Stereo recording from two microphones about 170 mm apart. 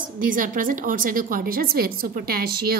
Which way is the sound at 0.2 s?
50° right (ahead or behind).